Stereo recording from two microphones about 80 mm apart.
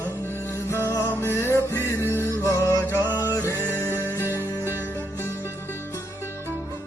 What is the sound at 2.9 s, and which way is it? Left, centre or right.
Music, right.